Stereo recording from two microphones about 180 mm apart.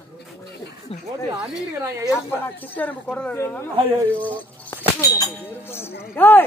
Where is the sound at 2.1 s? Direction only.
10° left (ahead or behind).